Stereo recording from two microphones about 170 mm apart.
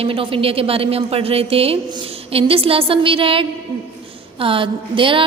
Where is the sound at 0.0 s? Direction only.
30° right (ahead or behind).